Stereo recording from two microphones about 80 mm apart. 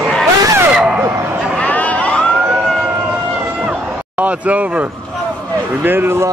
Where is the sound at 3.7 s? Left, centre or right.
Centre.